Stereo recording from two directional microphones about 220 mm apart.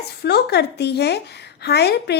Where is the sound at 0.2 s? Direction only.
50° left (ahead or behind).